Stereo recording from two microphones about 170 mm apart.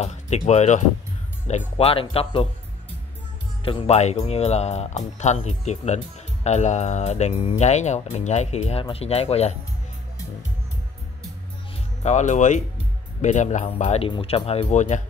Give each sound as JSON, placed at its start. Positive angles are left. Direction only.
{"t": 0.0, "sound": "speech", "side_deg": 40}
{"t": 3.6, "sound": "speech", "side_deg": 35}
{"t": 12.0, "sound": "speech", "side_deg": 45}
{"t": 14.7, "sound": "speech", "side_deg": 45}